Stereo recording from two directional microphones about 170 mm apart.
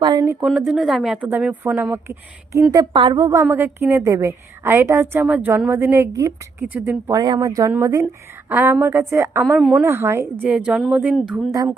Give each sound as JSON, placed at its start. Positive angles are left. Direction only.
{"t": 0.0, "sound": "a woman's voice", "side_deg": -25}
{"t": 0.4, "sound": "a woman's voice", "side_deg": -5}
{"t": 2.7, "sound": "a woman's voice", "side_deg": -30}
{"t": 6.6, "sound": "a woman's voice", "side_deg": -5}
{"t": 7.1, "sound": "a woman's voice", "side_deg": -20}
{"t": 9.5, "sound": "speech", "side_deg": 0}
{"t": 9.8, "sound": "a woman's voice", "side_deg": -15}